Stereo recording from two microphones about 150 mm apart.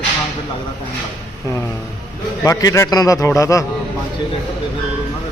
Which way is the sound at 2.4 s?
25° left (ahead or behind).